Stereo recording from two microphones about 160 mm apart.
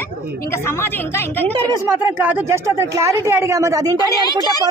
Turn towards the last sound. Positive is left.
turn(degrees=25)  # may be behind; listen again after turning